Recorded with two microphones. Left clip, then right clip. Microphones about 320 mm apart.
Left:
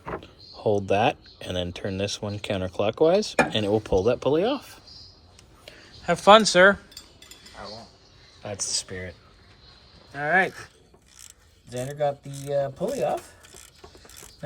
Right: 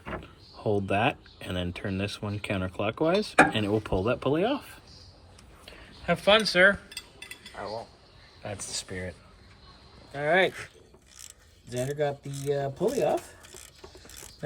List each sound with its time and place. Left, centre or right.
0.1 s door: left
0.6 s speech: centre
6.2 s speech: centre
7.6 s cutlery: centre
8.4 s speech: centre
10.2 s speech: centre
11.7 s speech: centre